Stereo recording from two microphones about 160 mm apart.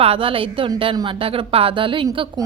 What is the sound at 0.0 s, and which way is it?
A woman's voice, 35° right (ahead or behind).